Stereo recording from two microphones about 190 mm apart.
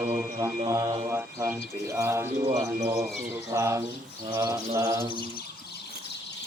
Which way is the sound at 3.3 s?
15° right (ahead or behind).